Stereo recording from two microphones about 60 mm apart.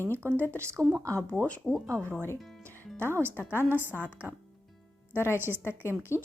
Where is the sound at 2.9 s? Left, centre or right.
Right.